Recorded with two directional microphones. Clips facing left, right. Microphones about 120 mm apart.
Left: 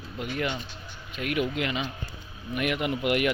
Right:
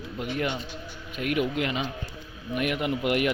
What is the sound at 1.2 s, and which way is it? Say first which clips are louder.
A man's voice: right 2 dB; 45° right (ahead or behind).